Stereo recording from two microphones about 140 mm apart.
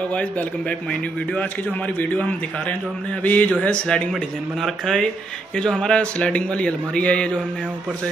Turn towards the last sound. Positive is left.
turn(degrees=10)  # may be behind; listen again after turning